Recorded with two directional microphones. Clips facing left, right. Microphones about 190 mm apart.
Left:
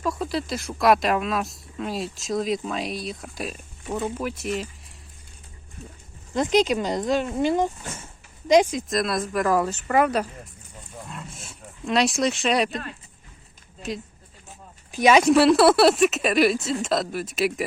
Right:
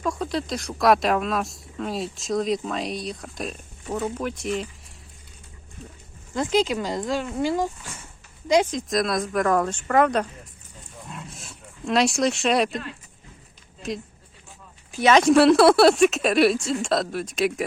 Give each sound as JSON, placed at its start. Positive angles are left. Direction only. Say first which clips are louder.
{"t": 0.0, "sound": "speech", "louder": "even", "side_deg": 5}
{"t": 6.3, "sound": "speech", "louder": "left 2 dB", "side_deg": 20}
{"t": 8.7, "sound": "speech", "louder": "right 1 dB", "side_deg": 0}
{"t": 11.1, "sound": "roaring cats", "louder": "even", "side_deg": 0}
{"t": 13.8, "sound": "speech", "louder": "right 1 dB", "side_deg": 0}